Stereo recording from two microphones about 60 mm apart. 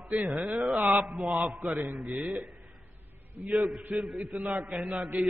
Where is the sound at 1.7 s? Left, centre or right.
Right.